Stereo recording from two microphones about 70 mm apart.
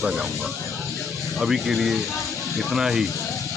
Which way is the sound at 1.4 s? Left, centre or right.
Centre.